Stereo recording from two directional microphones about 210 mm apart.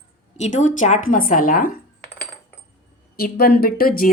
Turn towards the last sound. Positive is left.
turn(degrees=45)  # may be behind; listen again after turning